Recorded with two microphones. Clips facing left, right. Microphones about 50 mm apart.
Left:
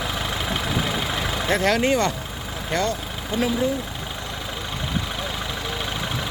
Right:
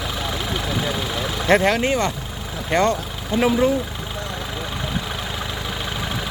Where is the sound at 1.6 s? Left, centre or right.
Centre.